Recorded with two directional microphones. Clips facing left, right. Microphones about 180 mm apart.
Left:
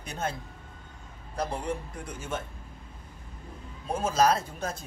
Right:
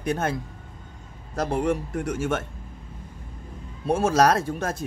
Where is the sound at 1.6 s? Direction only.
80° right.